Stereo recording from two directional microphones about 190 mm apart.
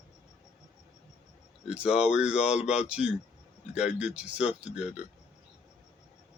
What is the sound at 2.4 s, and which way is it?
Speech, 35° left (ahead or behind).